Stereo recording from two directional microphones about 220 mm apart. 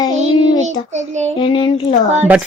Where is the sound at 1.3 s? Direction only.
20° left (ahead or behind).